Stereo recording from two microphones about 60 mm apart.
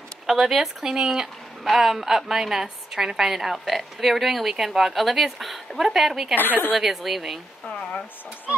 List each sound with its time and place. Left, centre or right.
0.3 s speech: centre
6.3 s a woman's voice: left
6.8 s speech: centre